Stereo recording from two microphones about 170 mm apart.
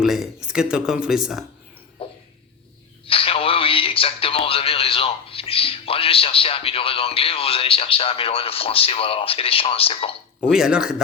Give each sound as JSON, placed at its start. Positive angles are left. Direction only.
{"t": 0.0, "sound": "speech", "side_deg": 0}
{"t": 2.0, "sound": "a sound", "side_deg": 35}
{"t": 10.5, "sound": "speech", "side_deg": -5}